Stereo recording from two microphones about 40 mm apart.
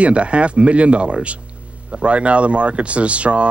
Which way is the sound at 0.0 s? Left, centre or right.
Right.